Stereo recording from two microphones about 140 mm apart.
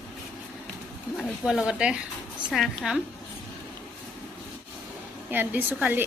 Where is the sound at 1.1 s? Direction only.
5° right (ahead or behind).